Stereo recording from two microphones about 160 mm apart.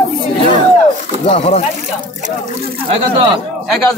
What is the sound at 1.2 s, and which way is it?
Speech, 40° left (ahead or behind).